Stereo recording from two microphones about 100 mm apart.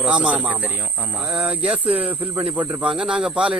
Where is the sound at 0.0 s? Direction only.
10° right (ahead or behind).